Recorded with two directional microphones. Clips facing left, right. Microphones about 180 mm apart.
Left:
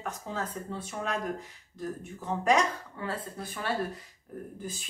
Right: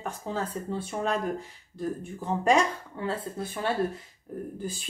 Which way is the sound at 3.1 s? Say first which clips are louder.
Right 5 dB; 25° right (ahead or behind).